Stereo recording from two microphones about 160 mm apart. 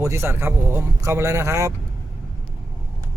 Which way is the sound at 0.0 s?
15° right (ahead or behind).